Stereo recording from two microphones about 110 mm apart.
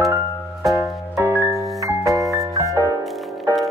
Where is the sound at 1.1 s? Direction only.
20° right (ahead or behind).